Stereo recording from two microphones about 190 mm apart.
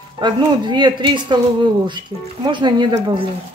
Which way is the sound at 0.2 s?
25° right (ahead or behind).